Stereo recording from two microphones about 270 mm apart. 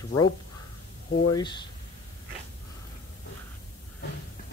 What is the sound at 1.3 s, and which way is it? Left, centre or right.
Speech, centre.